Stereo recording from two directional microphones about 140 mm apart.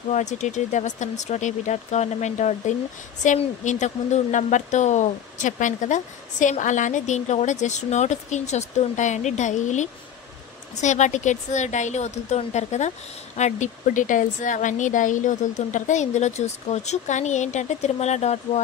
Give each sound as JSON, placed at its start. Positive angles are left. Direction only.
{"t": 0.1, "sound": "speech", "side_deg": 55}